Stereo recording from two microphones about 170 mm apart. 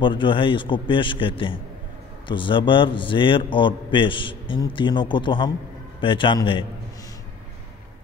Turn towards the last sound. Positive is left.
turn(degrees=30)  # may be behind; listen again after turning